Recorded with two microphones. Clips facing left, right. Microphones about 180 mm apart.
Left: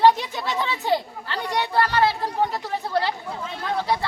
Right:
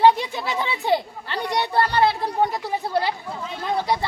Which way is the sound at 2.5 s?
10° right (ahead or behind).